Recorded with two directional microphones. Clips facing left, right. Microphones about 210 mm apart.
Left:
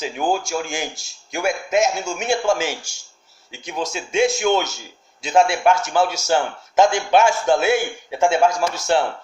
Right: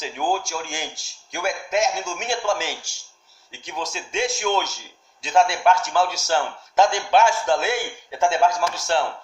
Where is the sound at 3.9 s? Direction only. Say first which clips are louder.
Left 8 dB; 10° left (ahead or behind).